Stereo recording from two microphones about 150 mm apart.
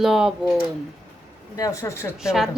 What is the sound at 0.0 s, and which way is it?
Speech, centre (ahead or behind).